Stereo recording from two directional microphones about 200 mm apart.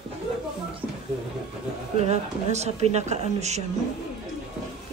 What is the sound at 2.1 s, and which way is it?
A man's voice, 35° right (ahead or behind).